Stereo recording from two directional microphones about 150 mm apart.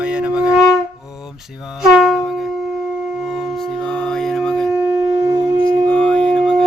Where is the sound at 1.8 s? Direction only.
Centre (ahead or behind).